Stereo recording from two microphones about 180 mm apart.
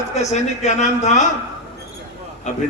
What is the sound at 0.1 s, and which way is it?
A man's voice, 40° left (ahead or behind).